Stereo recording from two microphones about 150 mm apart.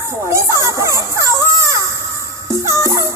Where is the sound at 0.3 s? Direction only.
20° right (ahead or behind).